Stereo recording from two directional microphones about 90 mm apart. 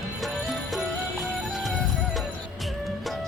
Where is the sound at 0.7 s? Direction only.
Centre (ahead or behind).